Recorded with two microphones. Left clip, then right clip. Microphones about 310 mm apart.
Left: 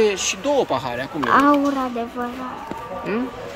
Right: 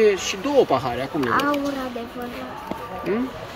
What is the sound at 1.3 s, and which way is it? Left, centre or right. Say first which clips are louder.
Speech: left 7 dB; left.